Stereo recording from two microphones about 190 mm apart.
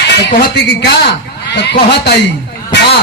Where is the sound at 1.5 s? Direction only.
65° left (ahead or behind).